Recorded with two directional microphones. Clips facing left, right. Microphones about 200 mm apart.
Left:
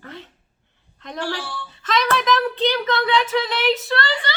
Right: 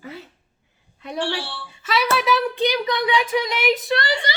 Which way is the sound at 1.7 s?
10° right (ahead or behind).